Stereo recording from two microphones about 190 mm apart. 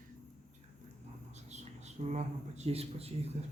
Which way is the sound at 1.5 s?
35° right (ahead or behind).